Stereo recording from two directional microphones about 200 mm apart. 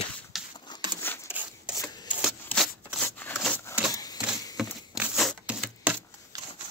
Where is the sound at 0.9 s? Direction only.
10° left (ahead or behind).